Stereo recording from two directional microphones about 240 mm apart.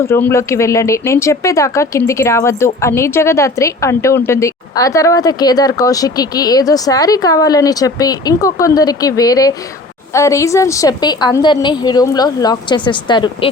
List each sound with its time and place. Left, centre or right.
0.1 s speech: centre